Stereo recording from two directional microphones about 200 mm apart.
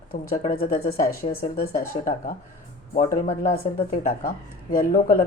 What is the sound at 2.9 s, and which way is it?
Speech, 40° left (ahead or behind).